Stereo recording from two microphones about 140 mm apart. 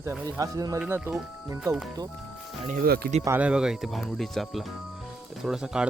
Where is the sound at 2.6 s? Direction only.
85° right.